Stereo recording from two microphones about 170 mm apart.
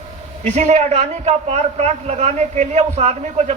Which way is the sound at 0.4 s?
40° right (ahead or behind).